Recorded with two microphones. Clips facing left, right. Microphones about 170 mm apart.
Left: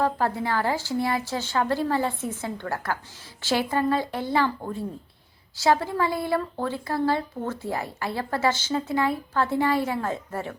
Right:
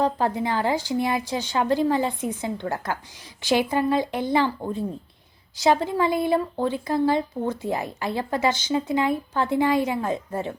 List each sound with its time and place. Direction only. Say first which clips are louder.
0.0 s speech: right 2 dB; 20° right (ahead or behind)